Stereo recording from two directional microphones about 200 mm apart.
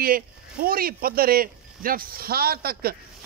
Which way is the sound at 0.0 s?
45° right (ahead or behind).